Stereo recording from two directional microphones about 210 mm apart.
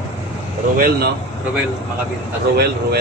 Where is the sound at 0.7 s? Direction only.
45° right (ahead or behind).